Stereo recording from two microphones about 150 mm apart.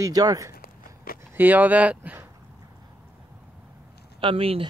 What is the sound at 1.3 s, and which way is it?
Speech, 10° right (ahead or behind).